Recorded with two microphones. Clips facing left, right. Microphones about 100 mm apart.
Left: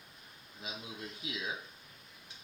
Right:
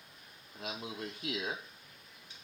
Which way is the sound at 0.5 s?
60° right (ahead or behind).